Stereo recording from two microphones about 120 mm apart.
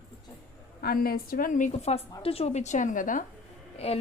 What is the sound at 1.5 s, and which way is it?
A woman's voice, 75° left (ahead or behind).